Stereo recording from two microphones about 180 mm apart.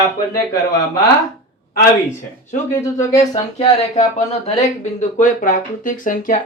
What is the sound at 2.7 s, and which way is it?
Speech, 15° left (ahead or behind).